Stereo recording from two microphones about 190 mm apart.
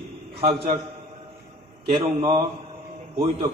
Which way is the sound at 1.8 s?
25° right (ahead or behind).